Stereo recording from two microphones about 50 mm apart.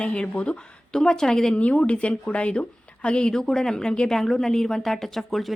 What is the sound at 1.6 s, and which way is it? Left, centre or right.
A woman's voice, left.